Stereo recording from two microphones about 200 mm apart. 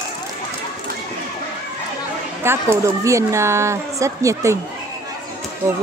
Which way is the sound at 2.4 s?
10° right (ahead or behind).